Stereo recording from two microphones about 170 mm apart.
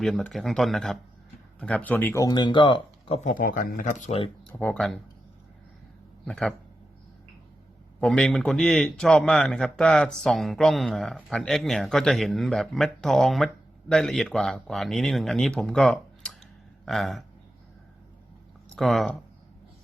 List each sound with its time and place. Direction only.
0.0 s a man's voice: centre (ahead or behind)
2.2 s speech: 25° left (ahead or behind)
3.2 s speech: 50° left (ahead or behind)
4.6 s a man's voice: 5° left (ahead or behind)
6.2 s speech: 5° left (ahead or behind)
8.0 s a man's voice: 5° left (ahead or behind)
18.8 s a man's voice: centre (ahead or behind)